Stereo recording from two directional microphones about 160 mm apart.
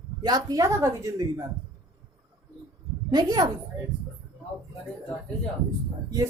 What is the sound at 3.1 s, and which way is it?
Speech, 25° right (ahead or behind).